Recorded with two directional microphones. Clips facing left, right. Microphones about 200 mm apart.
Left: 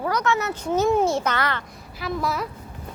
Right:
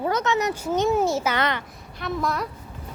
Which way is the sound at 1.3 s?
15° right (ahead or behind).